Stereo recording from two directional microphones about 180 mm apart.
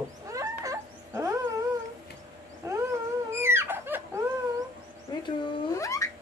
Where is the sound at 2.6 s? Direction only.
15° right (ahead or behind).